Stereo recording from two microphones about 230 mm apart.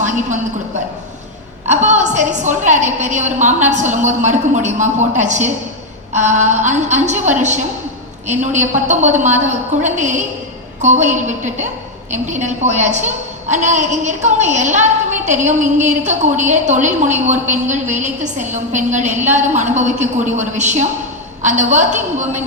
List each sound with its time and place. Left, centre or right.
1.6 s a woman's voice: right